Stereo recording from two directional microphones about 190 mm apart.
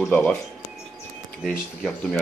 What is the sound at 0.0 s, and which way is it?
Speech, 5° left (ahead or behind).